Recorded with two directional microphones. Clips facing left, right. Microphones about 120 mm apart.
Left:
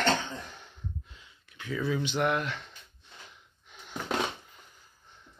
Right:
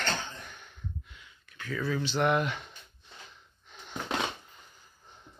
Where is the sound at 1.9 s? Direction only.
15° left (ahead or behind).